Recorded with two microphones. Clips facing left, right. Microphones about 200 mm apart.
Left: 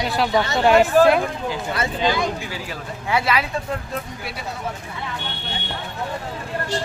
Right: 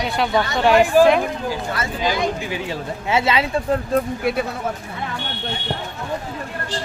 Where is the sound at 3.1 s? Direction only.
25° right (ahead or behind).